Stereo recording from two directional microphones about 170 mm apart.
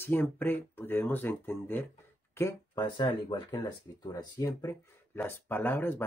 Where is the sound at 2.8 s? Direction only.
25° left (ahead or behind); by 6.0 s 10° left (ahead or behind).